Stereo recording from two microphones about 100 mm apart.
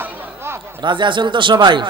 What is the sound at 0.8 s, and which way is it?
A woman's voice, 50° right (ahead or behind).